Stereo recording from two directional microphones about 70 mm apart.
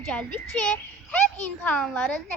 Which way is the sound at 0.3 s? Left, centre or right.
Left.